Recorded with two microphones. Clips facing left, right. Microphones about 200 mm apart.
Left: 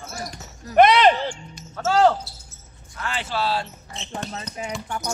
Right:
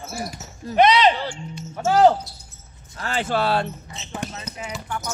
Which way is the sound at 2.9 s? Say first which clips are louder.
Right 4 dB; 40° right (ahead or behind).